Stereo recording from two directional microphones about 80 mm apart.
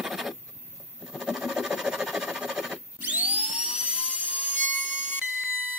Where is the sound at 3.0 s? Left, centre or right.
Centre.